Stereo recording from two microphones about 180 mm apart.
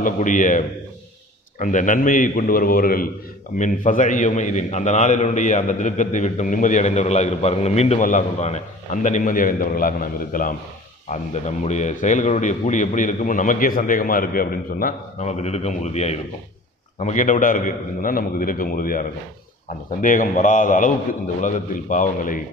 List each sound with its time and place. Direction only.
0.0 s a man's voice: 45° left (ahead or behind)
11.1 s a man's voice: 40° left (ahead or behind)